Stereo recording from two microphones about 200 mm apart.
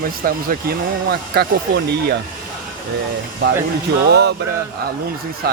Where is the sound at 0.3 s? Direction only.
45° right (ahead or behind).